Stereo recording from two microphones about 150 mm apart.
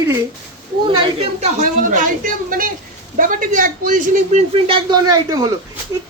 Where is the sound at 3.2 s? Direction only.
65° right (ahead or behind).